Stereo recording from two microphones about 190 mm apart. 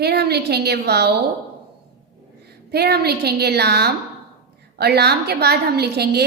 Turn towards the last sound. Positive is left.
turn(degrees=-55)  # may be behind; listen again after turning